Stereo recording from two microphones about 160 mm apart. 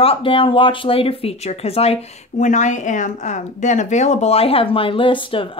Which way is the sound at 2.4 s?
50° left (ahead or behind).